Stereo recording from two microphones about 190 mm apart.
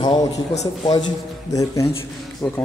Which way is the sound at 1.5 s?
15° left (ahead or behind).